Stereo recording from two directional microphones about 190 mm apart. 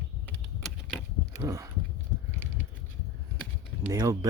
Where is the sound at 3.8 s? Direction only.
15° right (ahead or behind).